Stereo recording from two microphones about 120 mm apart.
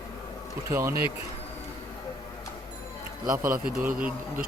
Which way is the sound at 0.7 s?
20° right (ahead or behind).